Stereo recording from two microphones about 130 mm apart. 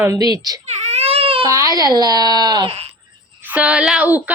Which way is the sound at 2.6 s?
50° right (ahead or behind).